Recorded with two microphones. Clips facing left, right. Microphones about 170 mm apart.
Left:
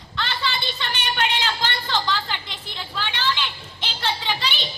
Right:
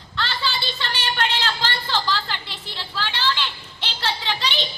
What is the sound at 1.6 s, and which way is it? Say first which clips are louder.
A woman's voice: even; 15° left (ahead or behind).